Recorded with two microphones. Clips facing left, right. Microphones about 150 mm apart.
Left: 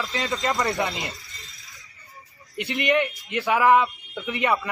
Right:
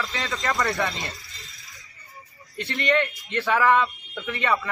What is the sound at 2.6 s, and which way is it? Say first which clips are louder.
A man's voice: left 1 dB; 15° left (ahead or behind).